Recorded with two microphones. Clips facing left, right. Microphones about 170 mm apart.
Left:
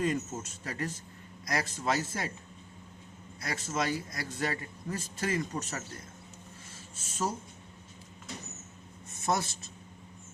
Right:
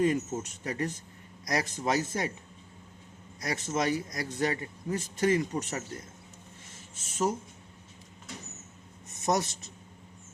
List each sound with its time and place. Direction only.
0.0 s a man's voice: 20° right (ahead or behind)
3.4 s a man's voice: 20° right (ahead or behind)
6.7 s a sound: 20° right (ahead or behind)
9.1 s speech: 20° right (ahead or behind)